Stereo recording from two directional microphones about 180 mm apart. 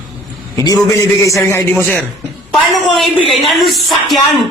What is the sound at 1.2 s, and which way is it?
Speech, 15° left (ahead or behind).